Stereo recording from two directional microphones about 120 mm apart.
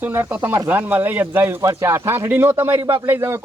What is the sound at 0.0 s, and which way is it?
A man's voice, 15° right (ahead or behind).